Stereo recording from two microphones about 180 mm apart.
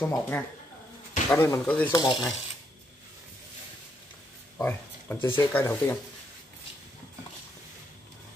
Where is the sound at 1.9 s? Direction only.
25° left (ahead or behind).